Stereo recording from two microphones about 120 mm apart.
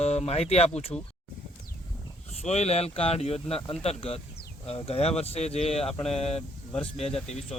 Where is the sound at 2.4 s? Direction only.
65° left (ahead or behind).